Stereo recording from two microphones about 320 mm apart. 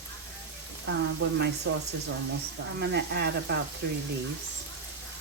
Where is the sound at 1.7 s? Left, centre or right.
Right.